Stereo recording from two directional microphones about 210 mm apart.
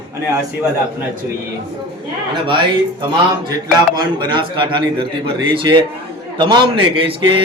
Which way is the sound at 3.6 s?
20° right (ahead or behind).